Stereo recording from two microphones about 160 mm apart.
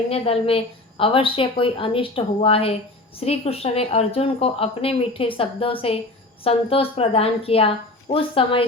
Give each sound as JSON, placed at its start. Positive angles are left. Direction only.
{"t": 0.1, "sound": "a woman's voice", "side_deg": 35}